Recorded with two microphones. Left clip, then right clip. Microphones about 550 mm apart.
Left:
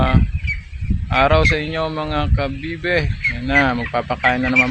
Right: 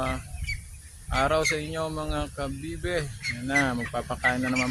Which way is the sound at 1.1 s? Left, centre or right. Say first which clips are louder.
Left 9 dB; right.